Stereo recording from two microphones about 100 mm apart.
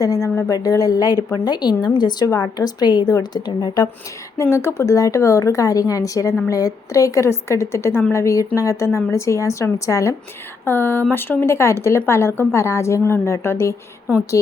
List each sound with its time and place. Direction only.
0.0 s a woman's voice: 35° left (ahead or behind)
4.4 s a woman's voice: 30° left (ahead or behind)